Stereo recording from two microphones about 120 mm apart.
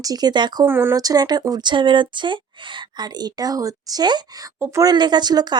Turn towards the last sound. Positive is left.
turn(degrees=-35)  # may be behind; listen again after turning